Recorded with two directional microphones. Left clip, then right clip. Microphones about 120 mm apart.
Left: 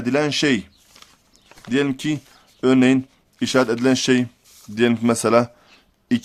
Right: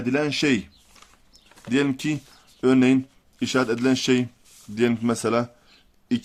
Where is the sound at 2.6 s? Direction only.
30° left (ahead or behind).